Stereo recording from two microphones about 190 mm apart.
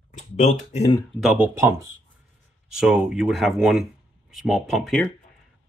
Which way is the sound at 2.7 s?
5° right (ahead or behind).